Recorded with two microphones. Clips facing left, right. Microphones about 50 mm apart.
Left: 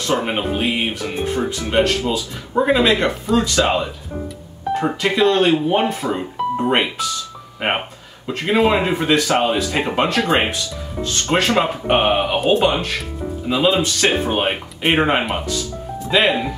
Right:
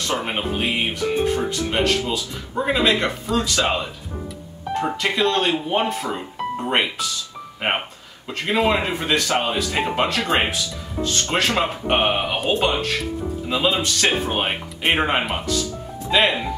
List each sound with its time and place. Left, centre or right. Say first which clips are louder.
0.2 s speech: left 3 dB; centre